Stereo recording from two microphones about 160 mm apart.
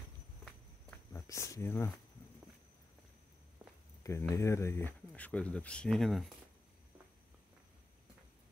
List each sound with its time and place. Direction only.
1.1 s speech: 20° left (ahead or behind)
4.0 s speech: 15° left (ahead or behind); by 6.3 s centre (ahead or behind)